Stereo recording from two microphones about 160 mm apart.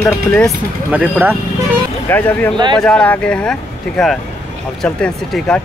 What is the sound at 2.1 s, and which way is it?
Speech, 10° left (ahead or behind).